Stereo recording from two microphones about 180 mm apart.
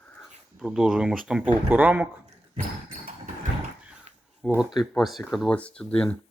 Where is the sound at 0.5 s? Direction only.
Centre (ahead or behind).